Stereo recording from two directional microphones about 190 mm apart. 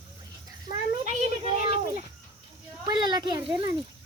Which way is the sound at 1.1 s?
35° right (ahead or behind).